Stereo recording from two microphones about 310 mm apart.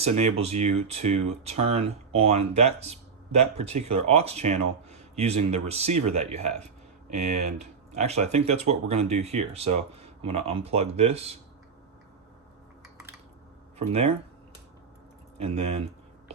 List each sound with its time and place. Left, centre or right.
0.1 s speech: right
13.7 s speech: centre
15.4 s speech: centre